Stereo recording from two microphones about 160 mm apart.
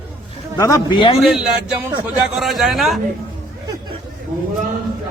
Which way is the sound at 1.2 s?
Centre (ahead or behind).